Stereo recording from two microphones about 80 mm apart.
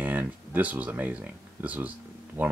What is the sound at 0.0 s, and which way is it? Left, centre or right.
Speech, centre.